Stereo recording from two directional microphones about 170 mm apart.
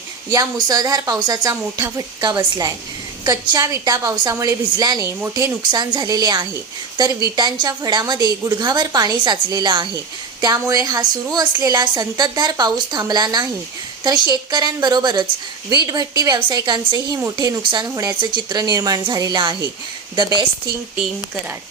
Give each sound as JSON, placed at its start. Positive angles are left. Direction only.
{"t": 0.3, "sound": "a woman's voice", "side_deg": -20}